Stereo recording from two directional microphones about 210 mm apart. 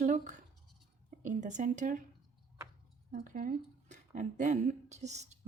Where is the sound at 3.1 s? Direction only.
35° right (ahead or behind).